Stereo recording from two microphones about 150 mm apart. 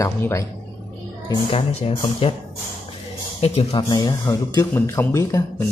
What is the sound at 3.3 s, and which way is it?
Speech, 40° left (ahead or behind).